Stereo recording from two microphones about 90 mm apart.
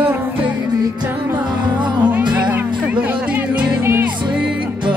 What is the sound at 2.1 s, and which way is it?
Music, 15° right (ahead or behind).